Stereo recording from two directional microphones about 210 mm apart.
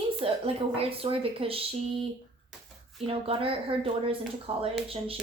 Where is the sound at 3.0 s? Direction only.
25° right (ahead or behind).